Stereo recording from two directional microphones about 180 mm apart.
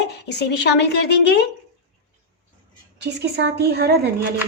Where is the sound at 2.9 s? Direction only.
70° right (ahead or behind).